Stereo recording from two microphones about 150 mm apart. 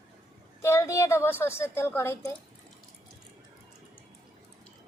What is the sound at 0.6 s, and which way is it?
A woman's voice, 20° left (ahead or behind).